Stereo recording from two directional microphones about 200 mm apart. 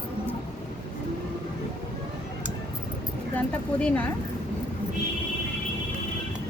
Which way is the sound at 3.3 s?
5° left (ahead or behind).